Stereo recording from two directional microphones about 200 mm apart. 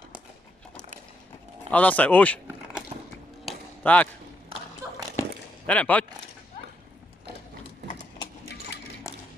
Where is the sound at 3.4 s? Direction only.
5° left (ahead or behind).